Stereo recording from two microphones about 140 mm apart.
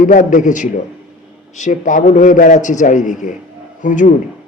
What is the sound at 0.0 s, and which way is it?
A man's voice, 65° left (ahead or behind).